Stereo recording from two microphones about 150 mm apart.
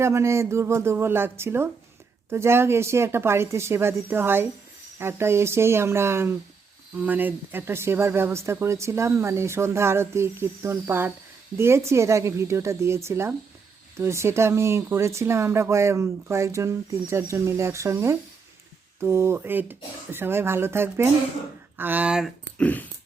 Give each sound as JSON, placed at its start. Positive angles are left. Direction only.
{"t": 0.0, "sound": "speech", "side_deg": -20}
{"t": 22.5, "sound": "dog", "side_deg": 10}